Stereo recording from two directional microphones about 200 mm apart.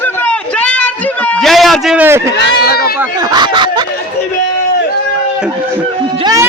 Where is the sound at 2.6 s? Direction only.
50° left (ahead or behind).